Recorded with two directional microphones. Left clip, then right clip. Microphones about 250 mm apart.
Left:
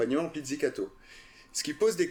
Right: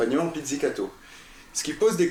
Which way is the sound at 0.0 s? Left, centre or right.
Left.